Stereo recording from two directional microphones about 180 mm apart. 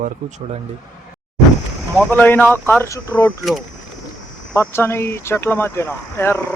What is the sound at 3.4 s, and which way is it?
Speech, centre (ahead or behind).